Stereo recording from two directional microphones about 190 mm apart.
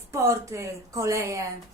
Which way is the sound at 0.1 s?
15° right (ahead or behind).